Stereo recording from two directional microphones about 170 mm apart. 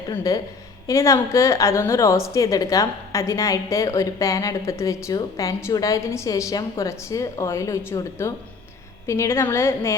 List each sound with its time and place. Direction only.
0.1 s a woman's voice: 20° left (ahead or behind)